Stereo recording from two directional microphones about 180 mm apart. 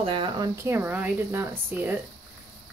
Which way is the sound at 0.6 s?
10° right (ahead or behind).